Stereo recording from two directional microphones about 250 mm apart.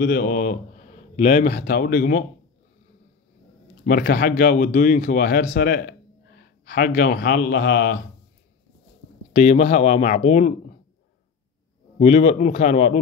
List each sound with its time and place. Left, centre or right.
0.0 s speech: left
3.8 s a man's voice: left
9.3 s speech: left
12.0 s speech: left